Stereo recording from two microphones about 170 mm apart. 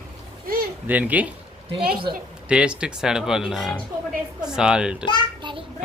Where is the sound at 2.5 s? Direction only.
5° right (ahead or behind).